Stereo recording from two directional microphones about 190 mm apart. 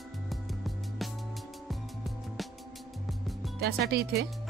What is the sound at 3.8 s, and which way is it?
Speech, 55° right (ahead or behind).